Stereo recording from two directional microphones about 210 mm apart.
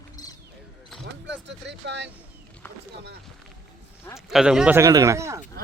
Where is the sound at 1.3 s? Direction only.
55° right (ahead or behind).